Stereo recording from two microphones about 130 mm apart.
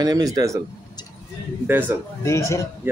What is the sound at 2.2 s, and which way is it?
Speech, 20° left (ahead or behind).